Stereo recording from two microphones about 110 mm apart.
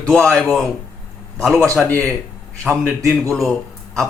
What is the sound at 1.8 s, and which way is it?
Speech, 15° left (ahead or behind).